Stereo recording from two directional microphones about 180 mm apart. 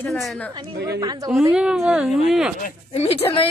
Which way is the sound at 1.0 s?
20° right (ahead or behind).